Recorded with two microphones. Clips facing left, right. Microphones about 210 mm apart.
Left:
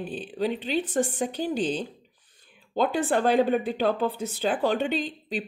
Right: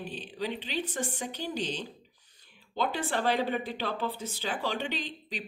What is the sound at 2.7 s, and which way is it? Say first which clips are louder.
Speech: left 7 dB; 50° left (ahead or behind).